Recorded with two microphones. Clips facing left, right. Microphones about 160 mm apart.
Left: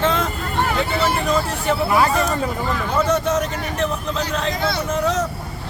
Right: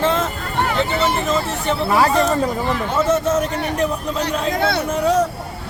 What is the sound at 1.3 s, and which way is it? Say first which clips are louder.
Speech: even; centre (ahead or behind).